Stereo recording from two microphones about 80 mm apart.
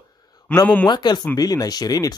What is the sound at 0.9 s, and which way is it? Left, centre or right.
Speech, left.